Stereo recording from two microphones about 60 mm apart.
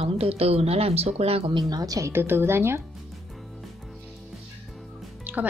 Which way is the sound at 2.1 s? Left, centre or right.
Right.